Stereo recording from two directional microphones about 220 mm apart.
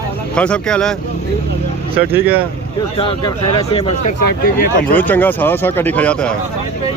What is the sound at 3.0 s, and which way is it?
Speech, 20° left (ahead or behind).